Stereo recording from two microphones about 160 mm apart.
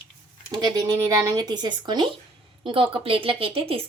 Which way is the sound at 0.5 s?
25° right (ahead or behind).